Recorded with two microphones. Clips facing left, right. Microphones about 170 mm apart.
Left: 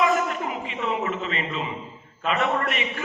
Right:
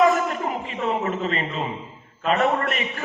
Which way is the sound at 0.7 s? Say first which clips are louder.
Right 2 dB; 40° right (ahead or behind).